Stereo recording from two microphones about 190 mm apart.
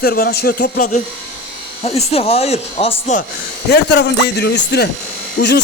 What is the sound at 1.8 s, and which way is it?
Speech, 30° left (ahead or behind).